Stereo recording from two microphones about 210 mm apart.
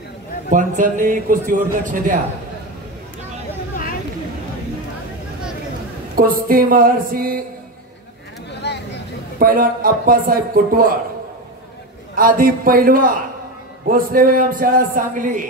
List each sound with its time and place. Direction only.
0.5 s a man's voice: 40° right (ahead or behind)
6.1 s speech: 45° right (ahead or behind)
8.6 s vehicle: 55° left (ahead or behind)
9.4 s speech: 40° right (ahead or behind)
12.2 s a man's voice: 40° right (ahead or behind)